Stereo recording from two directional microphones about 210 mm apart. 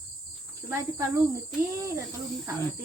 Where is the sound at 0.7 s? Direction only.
15° right (ahead or behind).